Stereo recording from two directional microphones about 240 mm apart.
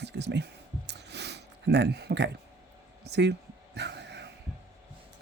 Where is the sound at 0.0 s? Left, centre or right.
Right.